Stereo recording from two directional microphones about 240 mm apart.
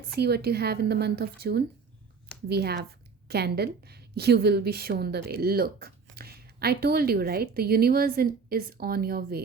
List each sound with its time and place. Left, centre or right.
0.2 s a woman's voice: right